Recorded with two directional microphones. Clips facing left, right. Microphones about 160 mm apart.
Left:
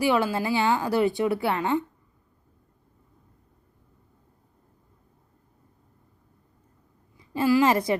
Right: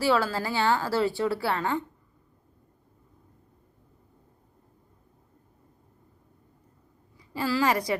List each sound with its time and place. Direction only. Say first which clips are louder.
0.0 s a woman's voice: left 2 dB; 15° left (ahead or behind)
7.2 s a woman's voice: left 6 dB; 20° left (ahead or behind)